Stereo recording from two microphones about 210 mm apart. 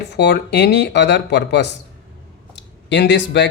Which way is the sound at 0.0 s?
55° left (ahead or behind).